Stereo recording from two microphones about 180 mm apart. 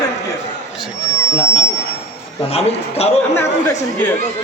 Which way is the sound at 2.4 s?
35° left (ahead or behind).